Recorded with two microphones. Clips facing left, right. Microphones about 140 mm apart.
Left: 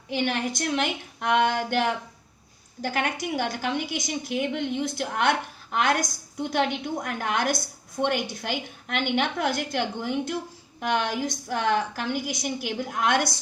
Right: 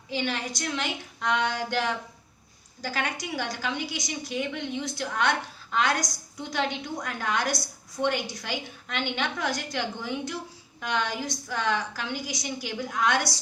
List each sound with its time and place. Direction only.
0.1 s a woman's voice: 55° left (ahead or behind)